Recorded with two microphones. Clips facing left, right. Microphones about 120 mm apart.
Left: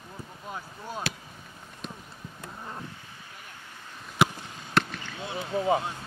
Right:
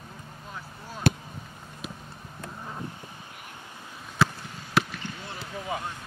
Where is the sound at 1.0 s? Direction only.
50° right (ahead or behind).